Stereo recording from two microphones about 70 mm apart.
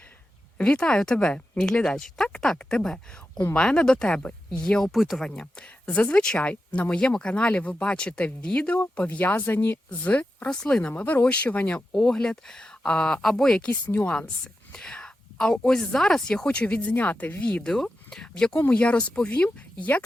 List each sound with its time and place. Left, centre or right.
0.6 s speech: centre
11.9 s speech: centre
13.7 s speech: left; by 18.5 s centre
18.7 s speech: centre